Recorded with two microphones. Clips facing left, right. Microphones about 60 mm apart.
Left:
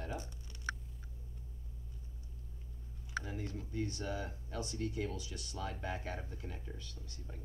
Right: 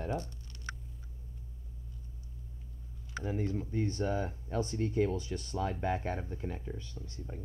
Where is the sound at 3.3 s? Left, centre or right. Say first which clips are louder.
Right 9 dB; right.